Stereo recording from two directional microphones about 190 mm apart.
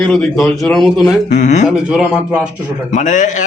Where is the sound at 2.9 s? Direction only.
40° left (ahead or behind).